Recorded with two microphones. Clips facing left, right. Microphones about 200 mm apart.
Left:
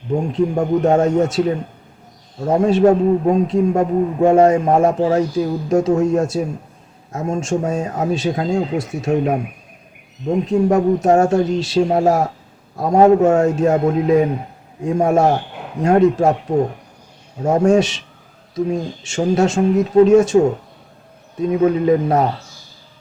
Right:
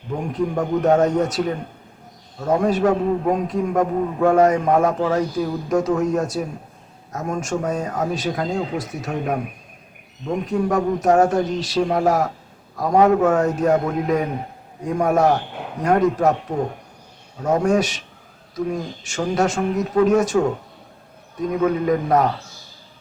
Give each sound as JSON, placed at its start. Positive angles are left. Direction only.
{"t": 0.2, "sound": "a man's voice", "side_deg": 25}
{"t": 17.4, "sound": "a man's voice", "side_deg": 25}
{"t": 21.6, "sound": "a man's voice", "side_deg": 25}